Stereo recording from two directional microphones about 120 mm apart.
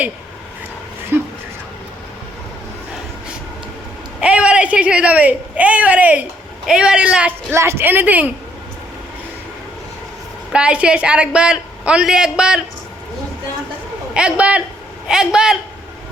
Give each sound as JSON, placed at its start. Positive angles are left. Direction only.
{"t": 1.1, "sound": "a sound", "side_deg": -15}
{"t": 4.2, "sound": "a man's voice", "side_deg": -10}
{"t": 7.5, "sound": "a woman's voice", "side_deg": -20}
{"t": 10.5, "sound": "a woman's voice", "side_deg": -10}
{"t": 14.1, "sound": "a woman's voice", "side_deg": -10}